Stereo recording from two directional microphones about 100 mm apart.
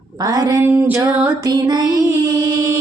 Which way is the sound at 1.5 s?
45° right (ahead or behind).